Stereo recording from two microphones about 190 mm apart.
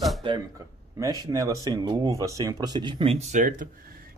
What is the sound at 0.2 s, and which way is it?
Speech, 25° right (ahead or behind).